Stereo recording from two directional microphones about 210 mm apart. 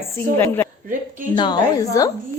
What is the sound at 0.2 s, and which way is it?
A woman's voice, 10° left (ahead or behind).